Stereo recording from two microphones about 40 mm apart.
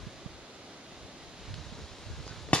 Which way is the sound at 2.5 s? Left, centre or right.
Left.